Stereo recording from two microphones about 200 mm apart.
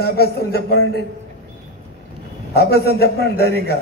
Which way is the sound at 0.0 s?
50° left (ahead or behind).